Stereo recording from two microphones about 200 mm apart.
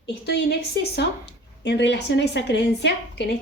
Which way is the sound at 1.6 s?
60° left (ahead or behind).